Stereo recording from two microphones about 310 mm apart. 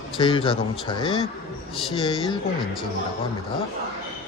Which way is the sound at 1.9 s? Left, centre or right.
Centre.